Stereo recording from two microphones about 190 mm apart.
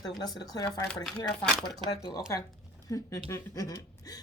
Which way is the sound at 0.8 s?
5° left (ahead or behind).